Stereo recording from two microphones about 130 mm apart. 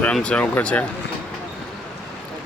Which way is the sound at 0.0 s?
10° left (ahead or behind).